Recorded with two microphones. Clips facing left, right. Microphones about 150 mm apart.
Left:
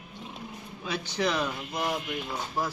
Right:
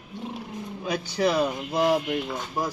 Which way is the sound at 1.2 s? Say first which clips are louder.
Right 5 dB; 35° right (ahead or behind).